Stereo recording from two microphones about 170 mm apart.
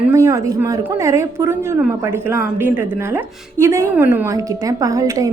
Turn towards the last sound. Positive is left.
turn(degrees=-20)  # may be behind; listen again after turning